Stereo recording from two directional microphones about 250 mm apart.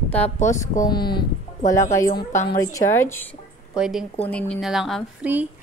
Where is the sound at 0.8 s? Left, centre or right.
Centre.